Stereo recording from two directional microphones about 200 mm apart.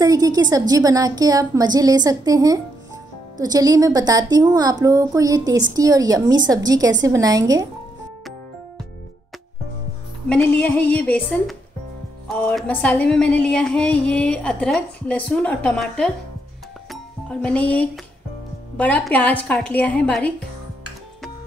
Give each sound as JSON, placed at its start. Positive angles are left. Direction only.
{"t": 0.0, "sound": "a woman's voice", "side_deg": -20}
{"t": 10.2, "sound": "a woman's voice", "side_deg": 5}
{"t": 12.3, "sound": "music", "side_deg": 5}
{"t": 18.8, "sound": "a woman's voice", "side_deg": 5}